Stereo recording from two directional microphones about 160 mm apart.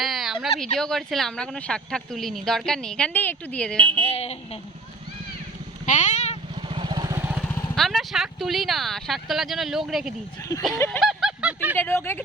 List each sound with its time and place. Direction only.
0.0 s a sound: centre (ahead or behind)
0.6 s speech: 5° left (ahead or behind)
4.0 s speech: 40° left (ahead or behind)
5.8 s vehicle: 50° left (ahead or behind)
6.6 s vehicle: 35° right (ahead or behind); by 7.3 s 20° right (ahead or behind)
7.4 s vehicle: 15° left (ahead or behind)
7.8 s speech: centre (ahead or behind)
10.8 s speech: 10° left (ahead or behind)
11.0 s a sound: centre (ahead or behind)
11.8 s speech: 15° left (ahead or behind)